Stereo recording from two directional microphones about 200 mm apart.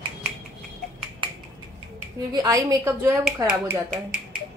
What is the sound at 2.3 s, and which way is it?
A woman's voice, 15° right (ahead or behind).